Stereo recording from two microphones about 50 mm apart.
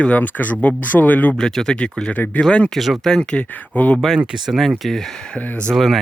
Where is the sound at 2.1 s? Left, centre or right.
Left.